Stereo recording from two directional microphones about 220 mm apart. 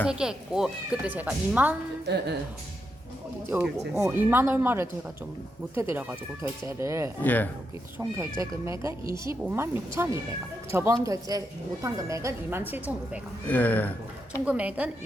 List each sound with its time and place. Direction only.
0.0 s speech: 5° right (ahead or behind)
2.0 s a woman's voice: 50° right (ahead or behind)
3.5 s a woman's voice: 10° right (ahead or behind)
7.2 s speech: 5° left (ahead or behind)
7.9 s a woman's voice: 15° right (ahead or behind)
13.5 s speech: 5° left (ahead or behind)
14.4 s speech: 5° right (ahead or behind)